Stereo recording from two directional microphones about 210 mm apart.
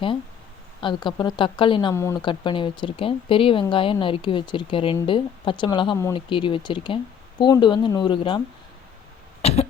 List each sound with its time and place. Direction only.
0.8 s speech: 20° left (ahead or behind)
1.9 s speech: 10° left (ahead or behind)
9.4 s cough: 30° left (ahead or behind)